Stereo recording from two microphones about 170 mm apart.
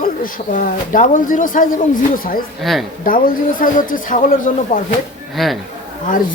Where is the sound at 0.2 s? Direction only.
55° left (ahead or behind).